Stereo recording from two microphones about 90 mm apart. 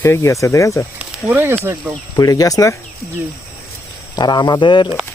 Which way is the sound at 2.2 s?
40° left (ahead or behind).